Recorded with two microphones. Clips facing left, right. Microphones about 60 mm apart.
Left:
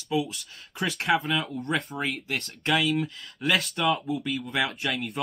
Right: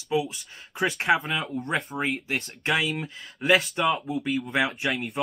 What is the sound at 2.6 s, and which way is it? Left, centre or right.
Speech, right.